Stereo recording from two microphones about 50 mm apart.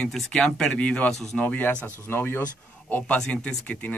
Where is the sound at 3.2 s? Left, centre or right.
Left.